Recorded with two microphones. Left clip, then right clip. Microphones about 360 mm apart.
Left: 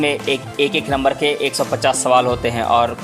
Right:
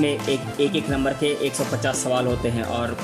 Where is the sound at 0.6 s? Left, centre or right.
Centre.